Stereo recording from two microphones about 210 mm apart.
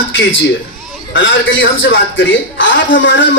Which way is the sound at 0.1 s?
65° left (ahead or behind).